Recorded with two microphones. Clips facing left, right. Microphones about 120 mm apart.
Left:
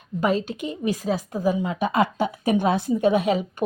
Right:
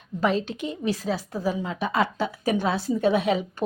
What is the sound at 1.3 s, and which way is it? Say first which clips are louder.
Speech: left 4 dB; 15° left (ahead or behind).